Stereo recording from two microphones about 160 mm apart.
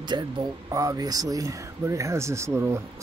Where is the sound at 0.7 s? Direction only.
20° right (ahead or behind).